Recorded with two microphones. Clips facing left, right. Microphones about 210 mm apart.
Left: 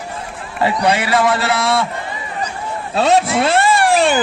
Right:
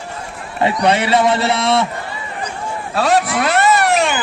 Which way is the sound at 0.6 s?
25° right (ahead or behind).